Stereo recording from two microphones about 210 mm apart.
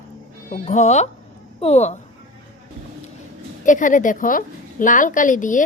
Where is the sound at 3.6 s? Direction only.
40° left (ahead or behind).